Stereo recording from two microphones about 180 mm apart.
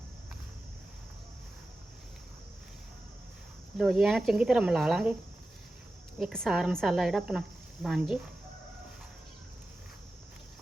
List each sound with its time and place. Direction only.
3.8 s a woman's voice: 5° right (ahead or behind)
6.1 s a woman's voice: centre (ahead or behind)